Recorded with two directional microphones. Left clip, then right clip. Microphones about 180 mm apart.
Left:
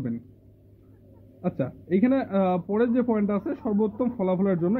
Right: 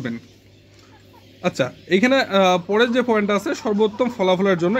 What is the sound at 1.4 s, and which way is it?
A man's voice, 20° right (ahead or behind).